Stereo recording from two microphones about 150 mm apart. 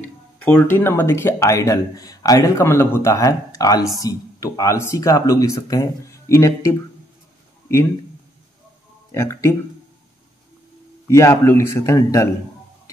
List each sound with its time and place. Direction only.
0.4 s speech: 10° left (ahead or behind)
9.1 s speech: 20° left (ahead or behind)
11.1 s speech: 20° left (ahead or behind)